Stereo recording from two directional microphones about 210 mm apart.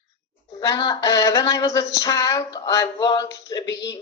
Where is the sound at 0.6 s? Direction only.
20° left (ahead or behind).